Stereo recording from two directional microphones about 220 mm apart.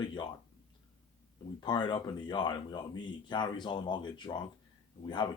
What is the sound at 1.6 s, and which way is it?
Speech, 20° left (ahead or behind).